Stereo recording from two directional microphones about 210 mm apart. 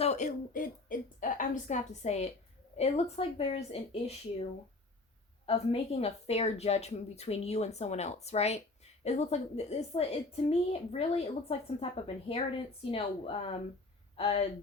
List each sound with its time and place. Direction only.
0.0 s a woman's voice: 30° left (ahead or behind)
5.5 s a woman's voice: 30° left (ahead or behind)